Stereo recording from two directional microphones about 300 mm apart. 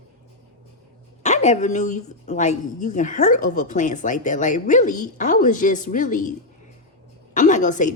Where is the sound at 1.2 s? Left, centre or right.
Left.